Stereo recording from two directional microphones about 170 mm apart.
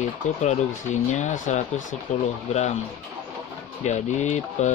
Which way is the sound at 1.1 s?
45° left (ahead or behind).